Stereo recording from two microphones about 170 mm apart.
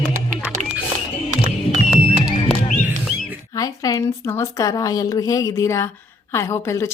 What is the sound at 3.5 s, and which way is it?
A woman's voice, 20° left (ahead or behind).